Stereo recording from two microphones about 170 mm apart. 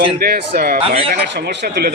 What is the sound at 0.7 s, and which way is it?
Speech, 35° right (ahead or behind).